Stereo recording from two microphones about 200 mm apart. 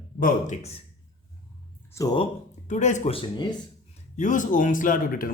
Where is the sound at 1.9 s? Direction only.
20° left (ahead or behind).